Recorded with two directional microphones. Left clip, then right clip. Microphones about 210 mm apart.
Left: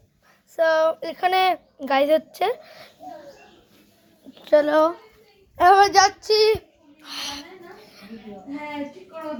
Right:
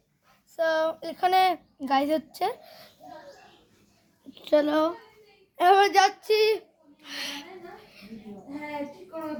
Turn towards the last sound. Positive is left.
turn(degrees=10)  # may be behind; listen again after turning